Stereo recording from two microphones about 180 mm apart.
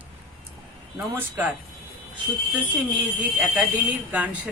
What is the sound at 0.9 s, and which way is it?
Speech, 10° right (ahead or behind).